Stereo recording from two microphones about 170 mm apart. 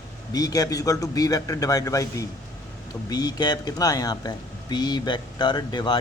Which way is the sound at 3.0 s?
25° left (ahead or behind).